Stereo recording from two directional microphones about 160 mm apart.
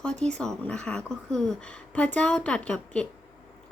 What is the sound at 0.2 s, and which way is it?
A woman's voice, 5° left (ahead or behind).